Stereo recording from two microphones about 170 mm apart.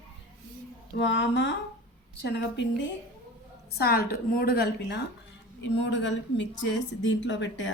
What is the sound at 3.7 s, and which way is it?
A woman's voice, 65° left (ahead or behind).